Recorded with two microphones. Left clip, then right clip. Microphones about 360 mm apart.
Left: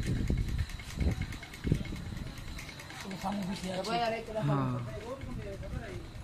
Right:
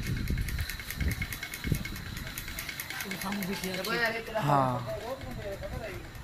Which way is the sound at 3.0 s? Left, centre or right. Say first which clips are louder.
Left 2 dB; left.